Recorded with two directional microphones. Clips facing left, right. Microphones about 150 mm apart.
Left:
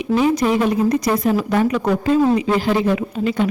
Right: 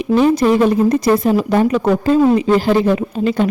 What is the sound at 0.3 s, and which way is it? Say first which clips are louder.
Speech: right 4 dB; 35° right (ahead or behind).